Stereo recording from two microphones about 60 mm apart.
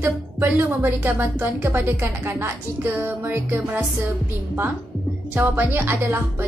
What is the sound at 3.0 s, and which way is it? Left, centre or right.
Speech, right.